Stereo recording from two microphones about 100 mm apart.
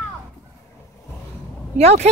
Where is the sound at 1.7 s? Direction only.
90° right.